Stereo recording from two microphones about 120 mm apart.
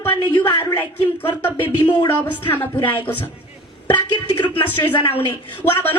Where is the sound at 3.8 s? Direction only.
40° left (ahead or behind).